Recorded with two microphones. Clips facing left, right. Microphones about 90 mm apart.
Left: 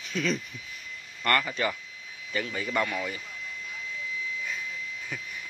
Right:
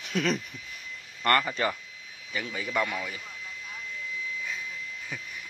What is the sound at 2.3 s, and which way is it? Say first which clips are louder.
Speech: left 1 dB; 5° right (ahead or behind).